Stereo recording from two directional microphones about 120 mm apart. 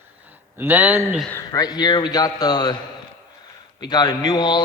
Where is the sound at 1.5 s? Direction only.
35° left (ahead or behind).